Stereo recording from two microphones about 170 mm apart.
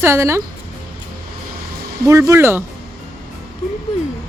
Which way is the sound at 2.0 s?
15° right (ahead or behind).